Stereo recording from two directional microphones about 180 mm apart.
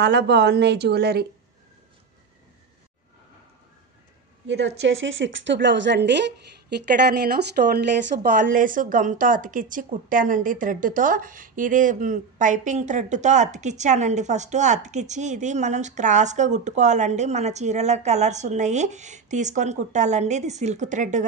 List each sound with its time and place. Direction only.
0.0 s speech: 70° right (ahead or behind)
4.5 s a woman's voice: 80° right; by 21.3 s 45° right (ahead or behind)